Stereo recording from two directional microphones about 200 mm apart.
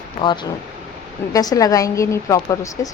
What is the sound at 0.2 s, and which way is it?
A woman's voice, 25° left (ahead or behind).